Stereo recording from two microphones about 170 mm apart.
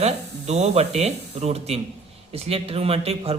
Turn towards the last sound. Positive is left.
turn(degrees=-35)  # may be behind; listen again after turning